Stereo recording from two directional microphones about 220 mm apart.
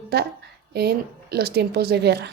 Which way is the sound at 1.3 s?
45° right (ahead or behind).